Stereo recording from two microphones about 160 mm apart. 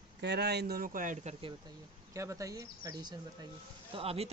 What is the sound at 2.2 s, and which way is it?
Speech, 20° right (ahead or behind).